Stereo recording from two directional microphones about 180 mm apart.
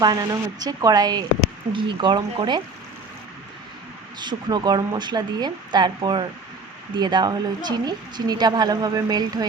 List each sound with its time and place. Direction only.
0.0 s a woman's voice: 20° right (ahead or behind)
4.2 s a woman's voice: 25° right (ahead or behind)